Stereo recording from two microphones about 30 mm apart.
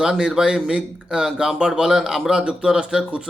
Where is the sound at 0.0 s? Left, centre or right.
Right.